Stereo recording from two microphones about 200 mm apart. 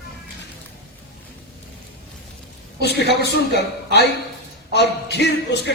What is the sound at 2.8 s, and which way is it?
A man's voice, 55° left (ahead or behind).